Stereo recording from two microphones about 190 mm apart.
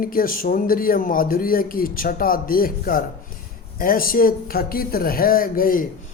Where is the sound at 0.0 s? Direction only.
50° left (ahead or behind).